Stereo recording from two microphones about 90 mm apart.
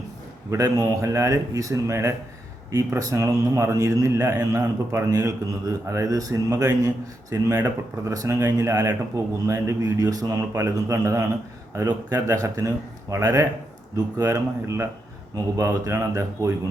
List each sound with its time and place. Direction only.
0.5 s a man's voice: 40° right (ahead or behind)